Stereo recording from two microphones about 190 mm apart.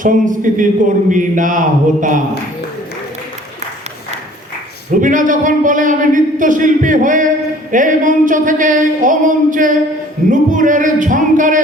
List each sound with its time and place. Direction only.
0.0 s a man's voice: 45° right (ahead or behind)
4.9 s a man's voice: 45° right (ahead or behind)